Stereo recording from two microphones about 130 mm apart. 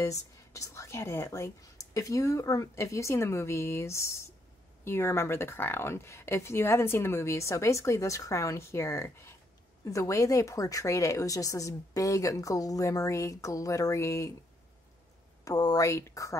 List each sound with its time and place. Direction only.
0.0 s speech: 25° left (ahead or behind)
15.4 s speech: 30° left (ahead or behind)